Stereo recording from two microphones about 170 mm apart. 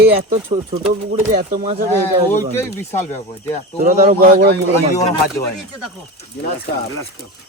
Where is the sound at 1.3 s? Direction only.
50° right (ahead or behind).